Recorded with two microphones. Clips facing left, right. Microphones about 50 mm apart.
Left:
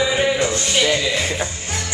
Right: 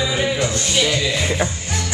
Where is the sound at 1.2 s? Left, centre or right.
Centre.